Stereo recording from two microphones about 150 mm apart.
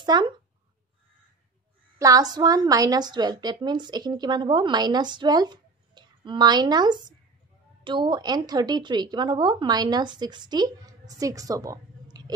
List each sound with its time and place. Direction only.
0.0 s a child's voice: 30° right (ahead or behind)
2.0 s a woman's voice: 25° right (ahead or behind)